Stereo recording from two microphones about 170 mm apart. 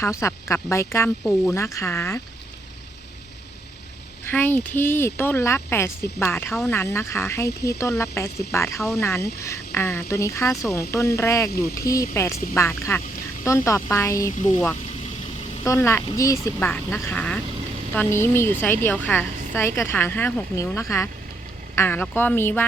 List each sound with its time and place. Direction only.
0.0 s a woman's voice: 15° left (ahead or behind)
4.3 s a woman's voice: 10° left (ahead or behind)
15.6 s a woman's voice: 15° left (ahead or behind)